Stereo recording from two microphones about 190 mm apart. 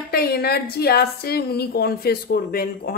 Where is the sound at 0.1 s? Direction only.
55° left (ahead or behind).